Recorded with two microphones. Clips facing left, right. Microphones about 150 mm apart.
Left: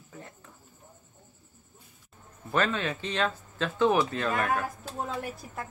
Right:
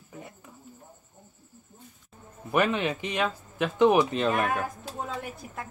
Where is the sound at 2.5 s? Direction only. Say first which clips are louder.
Right 3 dB; 15° right (ahead or behind).